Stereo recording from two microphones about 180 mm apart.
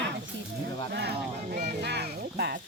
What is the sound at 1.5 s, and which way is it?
Music, 70° right (ahead or behind).